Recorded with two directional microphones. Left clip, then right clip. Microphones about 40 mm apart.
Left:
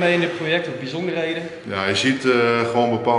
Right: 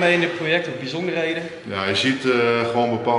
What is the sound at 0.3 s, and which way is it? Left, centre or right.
A man's voice, centre.